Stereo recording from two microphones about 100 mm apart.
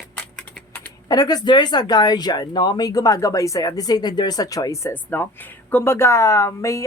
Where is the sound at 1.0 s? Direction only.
40° left (ahead or behind).